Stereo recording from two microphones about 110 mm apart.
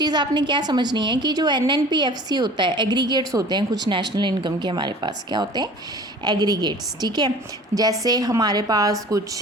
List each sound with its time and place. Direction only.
0.0 s a woman's voice: 40° right (ahead or behind)
7.7 s a woman's voice: 25° right (ahead or behind)
8.0 s a woman's voice: 35° right (ahead or behind)